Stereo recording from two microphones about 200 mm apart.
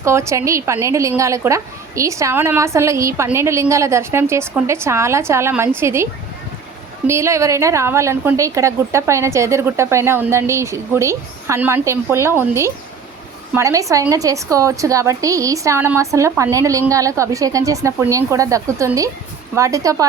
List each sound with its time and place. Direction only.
0.0 s a woman's voice: 15° right (ahead or behind)
7.1 s a woman's voice: 15° right (ahead or behind)